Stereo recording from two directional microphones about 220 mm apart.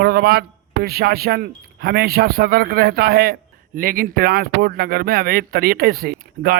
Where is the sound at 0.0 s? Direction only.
45° right (ahead or behind).